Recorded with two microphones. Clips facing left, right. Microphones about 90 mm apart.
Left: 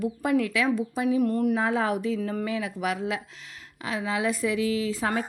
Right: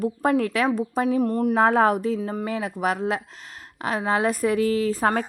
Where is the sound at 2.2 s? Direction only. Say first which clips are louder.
Right 1 dB; 20° right (ahead or behind).